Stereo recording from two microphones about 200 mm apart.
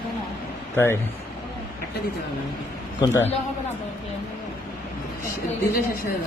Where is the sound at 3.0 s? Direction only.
15° left (ahead or behind).